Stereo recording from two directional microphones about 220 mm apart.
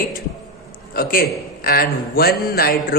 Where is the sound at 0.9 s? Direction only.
40° left (ahead or behind).